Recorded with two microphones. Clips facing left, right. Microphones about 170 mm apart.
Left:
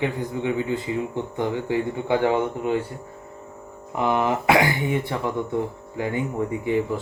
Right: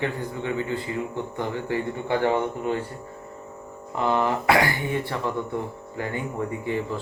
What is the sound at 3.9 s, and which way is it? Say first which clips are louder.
Speech: left 1 dB; 15° left (ahead or behind).